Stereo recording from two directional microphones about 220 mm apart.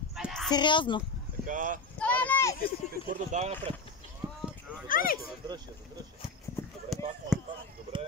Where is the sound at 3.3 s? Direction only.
30° right (ahead or behind).